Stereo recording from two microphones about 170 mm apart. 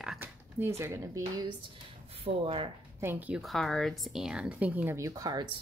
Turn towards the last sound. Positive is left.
turn(degrees=-20)  # may be behind; listen again after turning